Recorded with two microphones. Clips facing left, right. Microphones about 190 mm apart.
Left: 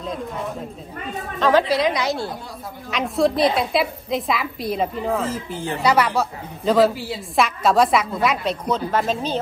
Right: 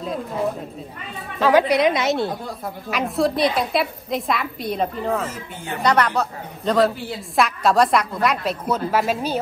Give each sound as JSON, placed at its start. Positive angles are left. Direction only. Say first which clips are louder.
{"t": 1.4, "sound": "a woman's voice", "louder": "right 2 dB", "side_deg": -10}
{"t": 2.9, "sound": "a woman's voice", "louder": "left 1 dB", "side_deg": 0}
{"t": 5.3, "sound": "speech", "louder": "left 5 dB", "side_deg": 30}
{"t": 5.8, "sound": "a woman's voice", "louder": "even", "side_deg": 5}